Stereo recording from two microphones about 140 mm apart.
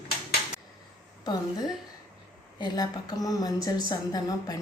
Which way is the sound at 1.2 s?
30° left (ahead or behind).